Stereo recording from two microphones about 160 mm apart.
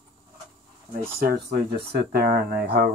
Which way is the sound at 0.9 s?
65° right (ahead or behind).